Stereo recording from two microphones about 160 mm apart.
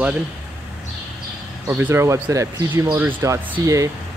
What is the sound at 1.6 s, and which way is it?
Speech, 15° right (ahead or behind).